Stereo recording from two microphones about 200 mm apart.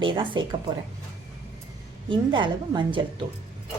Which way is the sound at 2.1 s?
25° right (ahead or behind).